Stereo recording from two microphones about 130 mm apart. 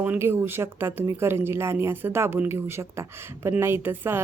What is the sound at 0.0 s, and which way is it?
Speech, 15° right (ahead or behind).